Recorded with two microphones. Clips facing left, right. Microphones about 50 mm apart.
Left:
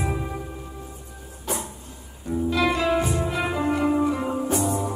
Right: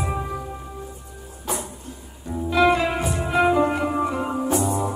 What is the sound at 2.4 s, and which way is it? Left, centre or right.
Music, centre.